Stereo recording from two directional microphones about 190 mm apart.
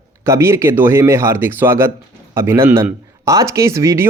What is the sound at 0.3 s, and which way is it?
Speech, 15° right (ahead or behind).